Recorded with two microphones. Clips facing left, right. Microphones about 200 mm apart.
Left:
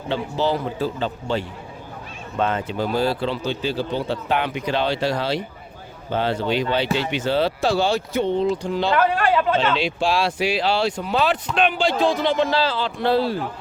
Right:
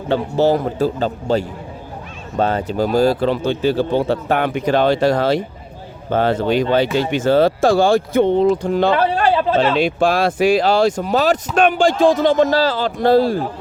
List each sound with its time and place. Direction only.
0.1 s speech: 45° right (ahead or behind)
8.9 s speech: 35° right (ahead or behind)
9.7 s speech: 50° right (ahead or behind)